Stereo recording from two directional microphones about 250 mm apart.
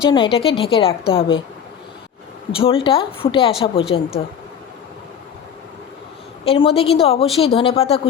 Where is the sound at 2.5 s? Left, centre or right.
Left.